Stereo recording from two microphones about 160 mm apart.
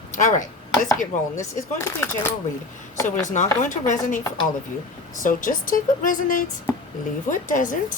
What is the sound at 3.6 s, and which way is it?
Speech, 50° left (ahead or behind).